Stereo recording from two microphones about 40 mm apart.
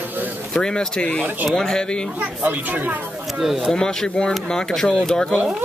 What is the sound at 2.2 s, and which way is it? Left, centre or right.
Speech, right.